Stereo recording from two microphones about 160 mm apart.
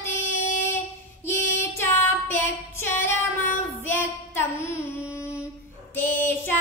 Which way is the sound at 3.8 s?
15° left (ahead or behind).